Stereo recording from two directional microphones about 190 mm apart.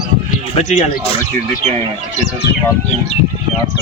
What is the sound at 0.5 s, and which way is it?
Speech, 35° left (ahead or behind).